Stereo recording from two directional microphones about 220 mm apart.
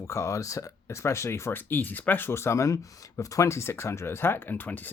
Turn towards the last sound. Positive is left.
turn(degrees=10)  # may be behind; listen again after turning